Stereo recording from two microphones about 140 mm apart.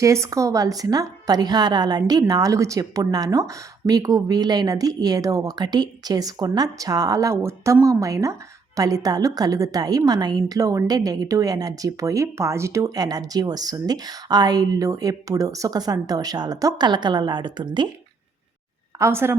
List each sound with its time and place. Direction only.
0.0 s a woman's voice: 20° right (ahead or behind)
18.9 s a woman's voice: 20° right (ahead or behind)